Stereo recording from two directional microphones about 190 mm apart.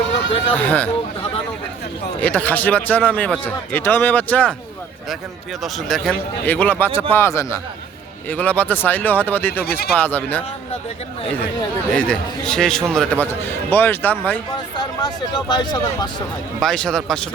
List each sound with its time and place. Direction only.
0.5 s a man's voice: 10° left (ahead or behind)
2.2 s a man's voice: 10° left (ahead or behind)
5.6 s a man's voice: centre (ahead or behind)
9.6 s speech: 55° left (ahead or behind)
10.0 s a man's voice: 10° left (ahead or behind)
11.9 s a man's voice: 5° left (ahead or behind)
14.8 s speech: 20° left (ahead or behind)
16.6 s a man's voice: 5° left (ahead or behind)